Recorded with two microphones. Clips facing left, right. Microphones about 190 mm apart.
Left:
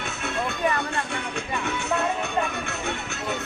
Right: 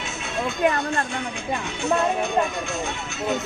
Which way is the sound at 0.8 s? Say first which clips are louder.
Right 3 dB; 65° left (ahead or behind).